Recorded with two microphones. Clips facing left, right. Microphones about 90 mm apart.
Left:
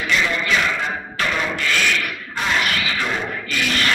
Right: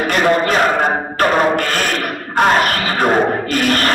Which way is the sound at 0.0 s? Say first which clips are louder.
Right 8 dB; 50° right (ahead or behind).